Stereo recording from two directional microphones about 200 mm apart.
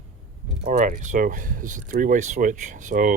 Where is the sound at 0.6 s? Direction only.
40° right (ahead or behind).